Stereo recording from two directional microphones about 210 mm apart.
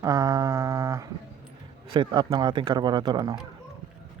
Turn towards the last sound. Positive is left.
turn(degrees=-20)  # may be behind; listen again after turning